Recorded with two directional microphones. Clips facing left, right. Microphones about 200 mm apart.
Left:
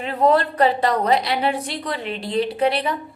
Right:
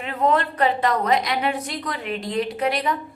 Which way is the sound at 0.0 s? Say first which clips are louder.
Left 3 dB; 35° left (ahead or behind).